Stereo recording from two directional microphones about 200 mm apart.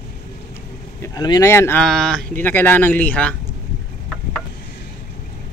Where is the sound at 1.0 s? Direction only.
20° left (ahead or behind).